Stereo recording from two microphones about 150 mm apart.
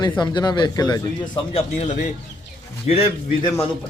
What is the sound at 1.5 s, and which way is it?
Speech, 50° left (ahead or behind).